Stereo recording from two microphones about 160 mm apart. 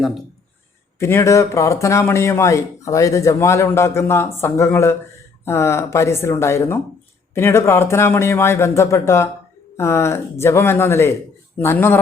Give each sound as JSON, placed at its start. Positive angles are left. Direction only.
{"t": 0.9, "sound": "speech", "side_deg": 15}